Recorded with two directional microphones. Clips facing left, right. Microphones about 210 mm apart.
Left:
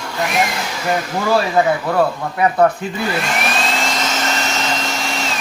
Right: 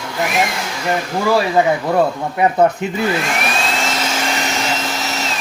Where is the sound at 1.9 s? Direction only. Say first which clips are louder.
Right 1 dB; 20° right (ahead or behind).